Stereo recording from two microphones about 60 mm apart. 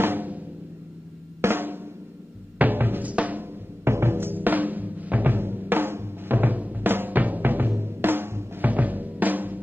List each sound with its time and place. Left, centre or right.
0.0 s drum: right
1.4 s drum: right
2.6 s music: right
3.8 s timpani: right
8.6 s drum: right